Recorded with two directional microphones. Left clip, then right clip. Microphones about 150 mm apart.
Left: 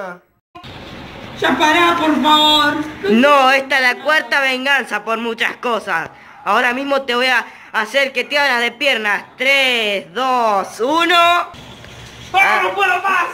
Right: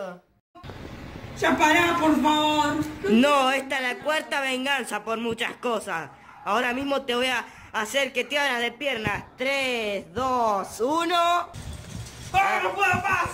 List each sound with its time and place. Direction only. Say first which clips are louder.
1.4 s speech: left 7 dB; 5° right (ahead or behind)
9.0 s speech: left 11 dB; centre (ahead or behind)